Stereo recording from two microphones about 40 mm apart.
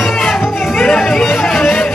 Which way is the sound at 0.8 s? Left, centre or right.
Left.